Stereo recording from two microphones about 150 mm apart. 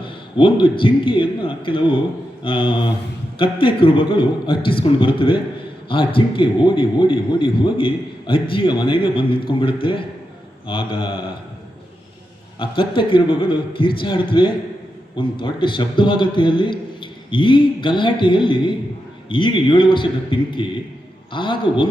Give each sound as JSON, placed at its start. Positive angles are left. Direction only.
{"t": 0.0, "sound": "a man's voice", "side_deg": 35}
{"t": 12.9, "sound": "a man's voice", "side_deg": 35}